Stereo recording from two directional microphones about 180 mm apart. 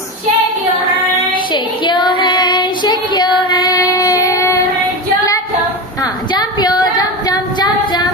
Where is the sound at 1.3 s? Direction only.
25° left (ahead or behind).